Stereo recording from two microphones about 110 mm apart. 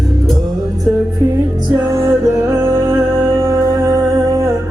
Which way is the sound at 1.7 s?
30° right (ahead or behind).